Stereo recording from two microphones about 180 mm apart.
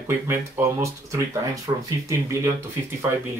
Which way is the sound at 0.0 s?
15° right (ahead or behind).